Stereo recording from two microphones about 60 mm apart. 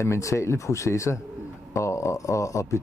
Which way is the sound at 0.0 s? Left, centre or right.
Left.